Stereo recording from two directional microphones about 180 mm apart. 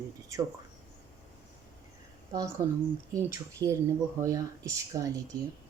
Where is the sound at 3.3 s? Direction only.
20° right (ahead or behind).